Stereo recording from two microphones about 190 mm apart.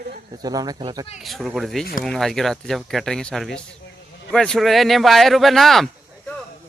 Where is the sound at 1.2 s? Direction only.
Centre (ahead or behind).